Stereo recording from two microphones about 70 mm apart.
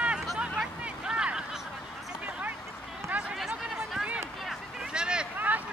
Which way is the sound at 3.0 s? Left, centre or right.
Centre.